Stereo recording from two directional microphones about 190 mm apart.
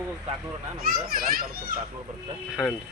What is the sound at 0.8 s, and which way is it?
A child's voice, 50° right (ahead or behind).